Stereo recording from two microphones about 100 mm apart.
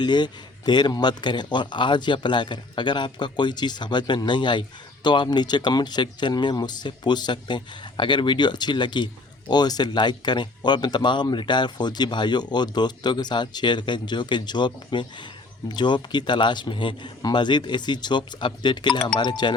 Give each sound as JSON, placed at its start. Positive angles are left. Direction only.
{"t": 0.0, "sound": "speech", "side_deg": 45}